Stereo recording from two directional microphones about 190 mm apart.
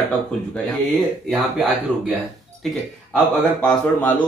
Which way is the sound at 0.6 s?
Centre (ahead or behind).